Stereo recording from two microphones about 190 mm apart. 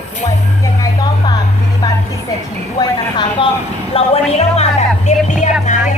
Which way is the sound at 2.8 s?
25° left (ahead or behind).